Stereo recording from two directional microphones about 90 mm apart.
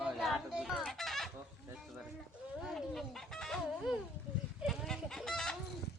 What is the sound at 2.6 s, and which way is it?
Chicken, centre (ahead or behind).